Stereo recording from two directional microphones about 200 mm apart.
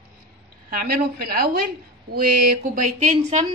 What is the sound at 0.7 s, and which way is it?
A woman's voice, 45° right (ahead or behind).